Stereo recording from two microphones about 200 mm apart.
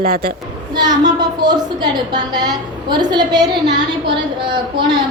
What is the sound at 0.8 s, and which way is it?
A woman's voice, 20° right (ahead or behind).